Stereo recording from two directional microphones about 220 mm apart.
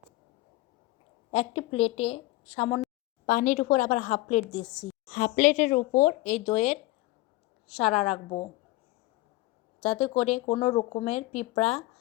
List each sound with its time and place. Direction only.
1.3 s speech: 25° left (ahead or behind)
3.2 s a woman's voice: 35° left (ahead or behind)
5.1 s a woman's voice: 35° left (ahead or behind)
7.9 s a woman's voice: centre (ahead or behind)
9.8 s speech: 30° left (ahead or behind)